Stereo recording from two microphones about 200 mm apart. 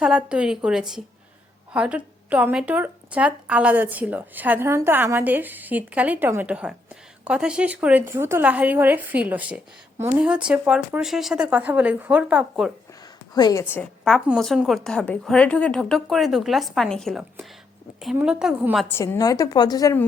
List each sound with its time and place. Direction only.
0.0 s a woman's voice: 5° right (ahead or behind)
12.9 s a woman's voice: 20° left (ahead or behind); by 18.9 s centre (ahead or behind)
18.9 s a woman's voice: 15° left (ahead or behind)